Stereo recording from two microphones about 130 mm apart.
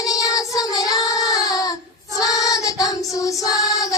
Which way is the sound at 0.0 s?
25° left (ahead or behind).